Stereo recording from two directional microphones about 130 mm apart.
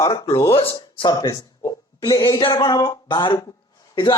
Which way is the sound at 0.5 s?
45° left (ahead or behind).